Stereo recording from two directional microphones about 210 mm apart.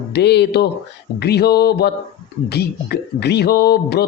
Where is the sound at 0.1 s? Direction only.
55° left (ahead or behind).